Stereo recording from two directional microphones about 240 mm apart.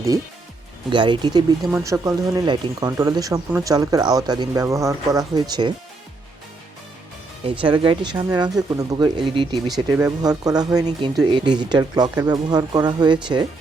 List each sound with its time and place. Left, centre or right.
0.9 s speech: centre
7.6 s speech: right
9.6 s speech: centre
10.2 s speech: centre